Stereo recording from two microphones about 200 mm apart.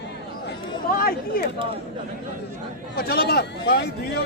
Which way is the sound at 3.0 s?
50° left (ahead or behind).